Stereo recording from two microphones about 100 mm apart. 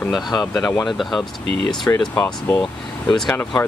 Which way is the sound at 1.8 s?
20° left (ahead or behind).